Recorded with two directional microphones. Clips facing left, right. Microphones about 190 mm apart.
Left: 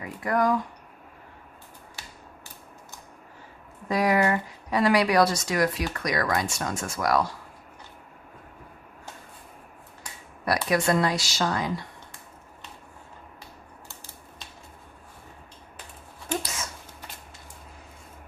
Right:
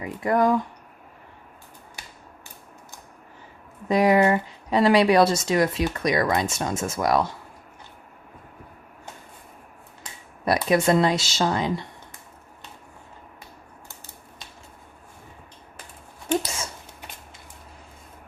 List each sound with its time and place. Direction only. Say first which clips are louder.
0.0 s speech: right 4 dB; 25° right (ahead or behind)
3.8 s speech: right 5 dB; 20° right (ahead or behind)
10.0 s speech: right 4 dB; 25° right (ahead or behind)